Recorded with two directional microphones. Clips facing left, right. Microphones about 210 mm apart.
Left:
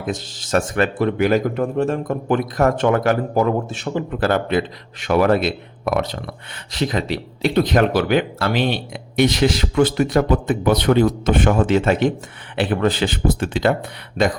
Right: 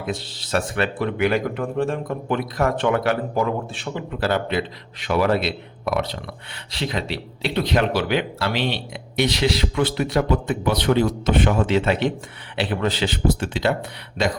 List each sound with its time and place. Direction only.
0.0 s speech: 45° left (ahead or behind)